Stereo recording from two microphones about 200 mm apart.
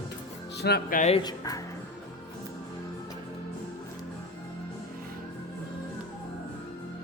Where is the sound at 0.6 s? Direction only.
50° left (ahead or behind).